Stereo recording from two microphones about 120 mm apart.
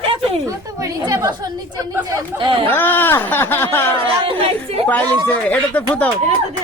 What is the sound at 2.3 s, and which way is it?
Speech, 40° right (ahead or behind).